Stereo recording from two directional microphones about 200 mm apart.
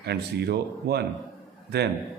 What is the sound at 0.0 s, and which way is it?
A man's voice, 55° right (ahead or behind).